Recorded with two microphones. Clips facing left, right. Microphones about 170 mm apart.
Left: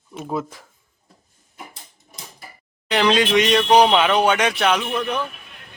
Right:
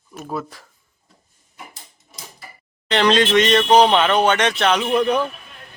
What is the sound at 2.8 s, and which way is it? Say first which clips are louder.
Speech: right 1 dB; 10° left (ahead or behind).